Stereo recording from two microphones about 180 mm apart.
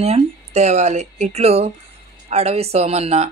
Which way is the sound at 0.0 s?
35° right (ahead or behind).